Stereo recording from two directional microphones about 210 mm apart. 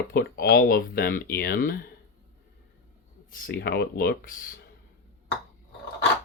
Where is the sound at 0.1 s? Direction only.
45° left (ahead or behind).